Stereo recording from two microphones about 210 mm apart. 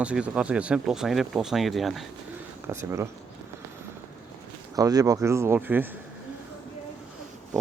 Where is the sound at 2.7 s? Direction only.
15° right (ahead or behind).